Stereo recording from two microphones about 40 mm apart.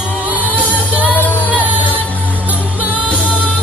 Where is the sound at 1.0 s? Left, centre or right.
Left.